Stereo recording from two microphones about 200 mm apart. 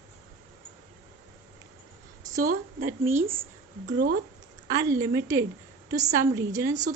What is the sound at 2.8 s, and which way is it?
Speech, 10° right (ahead or behind).